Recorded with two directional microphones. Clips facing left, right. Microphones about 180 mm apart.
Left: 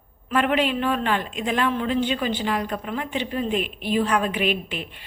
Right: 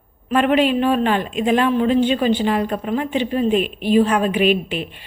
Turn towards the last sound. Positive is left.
turn(degrees=-15)  # may be behind; listen again after turning